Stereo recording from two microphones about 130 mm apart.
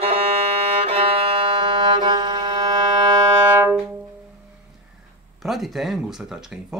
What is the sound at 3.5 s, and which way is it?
Brass instrument, 15° right (ahead or behind).